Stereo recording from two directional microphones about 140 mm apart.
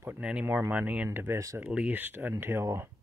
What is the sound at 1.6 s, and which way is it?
Speech, 10° right (ahead or behind).